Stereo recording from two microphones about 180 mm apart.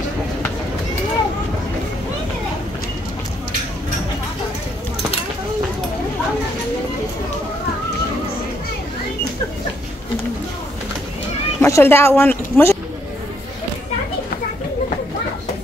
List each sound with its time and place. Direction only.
11.6 s speech: 15° left (ahead or behind)